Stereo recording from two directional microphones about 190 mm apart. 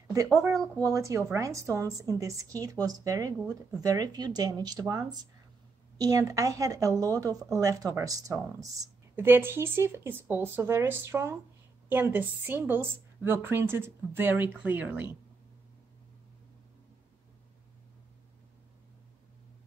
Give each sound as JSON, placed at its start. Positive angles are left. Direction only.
{"t": 0.8, "sound": "a woman's voice", "side_deg": -15}